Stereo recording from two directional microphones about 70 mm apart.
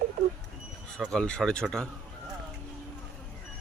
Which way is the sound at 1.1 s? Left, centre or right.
Centre.